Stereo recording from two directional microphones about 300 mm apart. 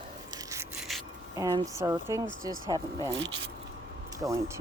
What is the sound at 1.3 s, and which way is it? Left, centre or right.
Speech, centre.